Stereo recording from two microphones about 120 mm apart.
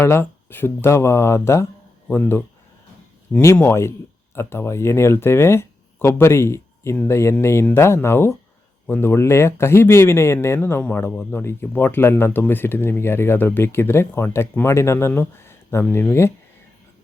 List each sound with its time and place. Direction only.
0.0 s speech: 20° left (ahead or behind)
3.4 s speech: 20° left (ahead or behind)